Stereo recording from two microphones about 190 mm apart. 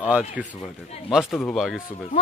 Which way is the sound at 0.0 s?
5° right (ahead or behind).